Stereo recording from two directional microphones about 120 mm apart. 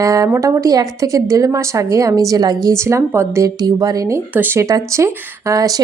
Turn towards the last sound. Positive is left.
turn(degrees=-30)  # may be behind; listen again after turning